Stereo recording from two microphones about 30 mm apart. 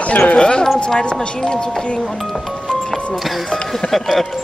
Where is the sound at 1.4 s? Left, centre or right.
Left.